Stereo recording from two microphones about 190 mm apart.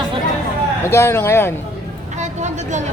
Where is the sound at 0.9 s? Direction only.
15° left (ahead or behind).